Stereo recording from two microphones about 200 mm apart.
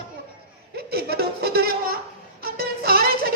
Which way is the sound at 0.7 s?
50° right (ahead or behind).